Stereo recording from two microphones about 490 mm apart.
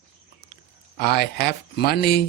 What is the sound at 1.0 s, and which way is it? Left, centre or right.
Speech, centre.